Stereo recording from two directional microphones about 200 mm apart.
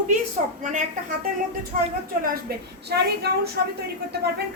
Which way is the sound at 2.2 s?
50° right (ahead or behind).